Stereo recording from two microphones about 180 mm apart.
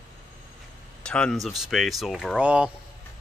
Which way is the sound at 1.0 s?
5° left (ahead or behind).